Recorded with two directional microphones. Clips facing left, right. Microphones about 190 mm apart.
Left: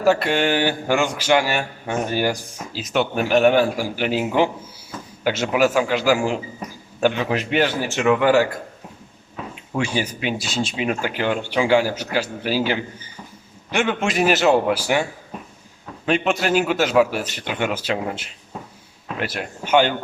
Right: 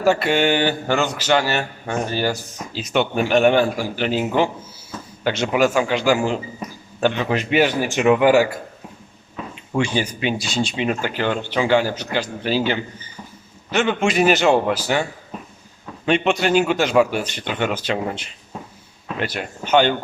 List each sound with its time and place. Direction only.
0.0 s a man's voice: centre (ahead or behind)
7.6 s speech: 15° right (ahead or behind)
9.3 s a man's voice: 5° left (ahead or behind)
16.0 s a man's voice: centre (ahead or behind)